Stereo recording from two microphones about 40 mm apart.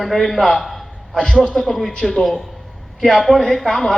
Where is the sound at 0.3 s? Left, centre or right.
Centre.